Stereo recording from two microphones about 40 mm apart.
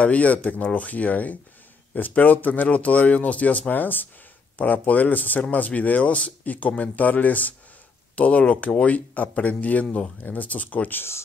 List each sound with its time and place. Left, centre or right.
0.0 s speech: left
3.7 s speech: left
10.9 s speech: left